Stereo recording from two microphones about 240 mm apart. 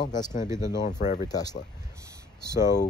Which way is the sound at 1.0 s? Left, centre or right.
Left.